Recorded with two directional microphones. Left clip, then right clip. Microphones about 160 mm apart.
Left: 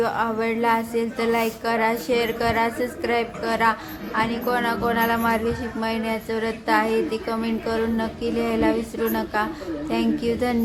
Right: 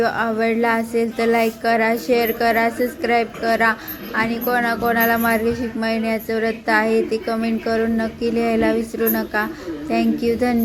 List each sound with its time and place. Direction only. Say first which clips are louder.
0.0 s a woman's voice: right 4 dB; 25° right (ahead or behind)